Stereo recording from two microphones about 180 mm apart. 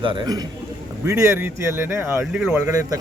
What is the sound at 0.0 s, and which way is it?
Speech, 25° right (ahead or behind).